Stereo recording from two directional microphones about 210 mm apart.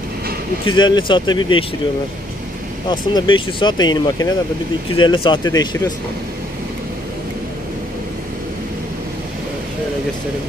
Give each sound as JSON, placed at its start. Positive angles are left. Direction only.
{"t": 0.7, "sound": "speech", "side_deg": 20}
{"t": 2.9, "sound": "speech", "side_deg": 20}